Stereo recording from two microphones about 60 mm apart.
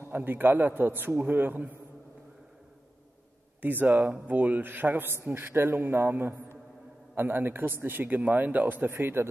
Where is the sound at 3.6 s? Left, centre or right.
Right.